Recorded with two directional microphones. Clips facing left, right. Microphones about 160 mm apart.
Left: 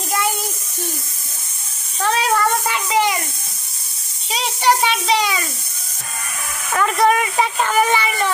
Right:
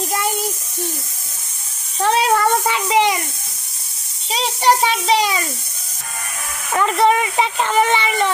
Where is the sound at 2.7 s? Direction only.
20° right (ahead or behind).